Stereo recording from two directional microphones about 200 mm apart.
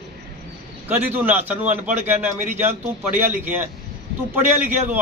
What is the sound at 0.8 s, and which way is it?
A man's voice, 10° right (ahead or behind).